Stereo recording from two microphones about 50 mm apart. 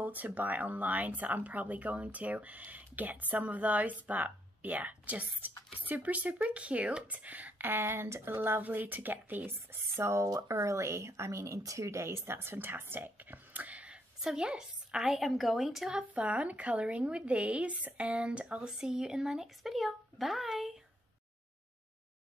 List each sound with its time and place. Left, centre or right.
0.0 s speech: right
9.9 s speech: right
14.2 s a woman's voice: centre
15.9 s a woman's voice: right
18.8 s speech: centre